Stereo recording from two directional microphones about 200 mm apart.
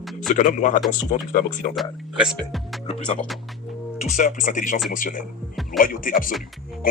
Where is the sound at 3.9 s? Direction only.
40° left (ahead or behind).